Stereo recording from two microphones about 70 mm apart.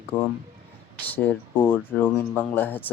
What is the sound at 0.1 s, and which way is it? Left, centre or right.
Speech, left.